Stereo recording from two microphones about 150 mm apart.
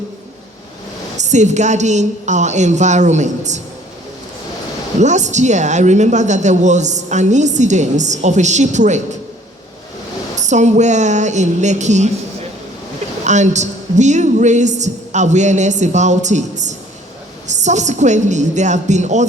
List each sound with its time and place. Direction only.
1.1 s a woman's voice: 50° right (ahead or behind)
4.9 s a woman's voice: 50° right (ahead or behind)
10.3 s a woman's voice: 50° right (ahead or behind)
13.2 s a woman's voice: 50° right (ahead or behind)